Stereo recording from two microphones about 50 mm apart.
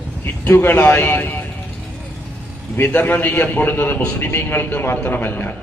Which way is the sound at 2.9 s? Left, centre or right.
Left.